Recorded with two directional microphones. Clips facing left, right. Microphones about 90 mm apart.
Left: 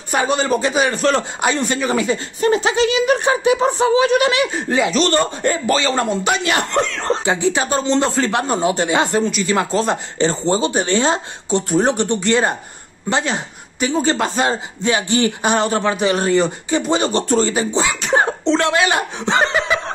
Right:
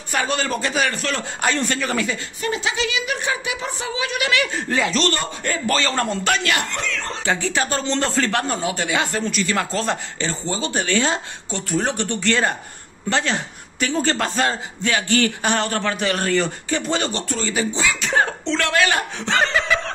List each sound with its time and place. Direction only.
0.1 s speech: 20° left (ahead or behind)
1.4 s speech: 15° left (ahead or behind)
2.0 s speech: 35° left (ahead or behind)
4.4 s speech: 20° left (ahead or behind)
6.5 s speech: 35° left (ahead or behind)
7.2 s speech: 15° left (ahead or behind)
8.6 s speech: 30° left (ahead or behind)
9.2 s speech: 5° left (ahead or behind)
9.5 s speech: 15° left (ahead or behind)
10.1 s speech: 30° left (ahead or behind)